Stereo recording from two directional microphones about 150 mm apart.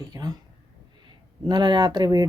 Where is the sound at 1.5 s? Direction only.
30° right (ahead or behind).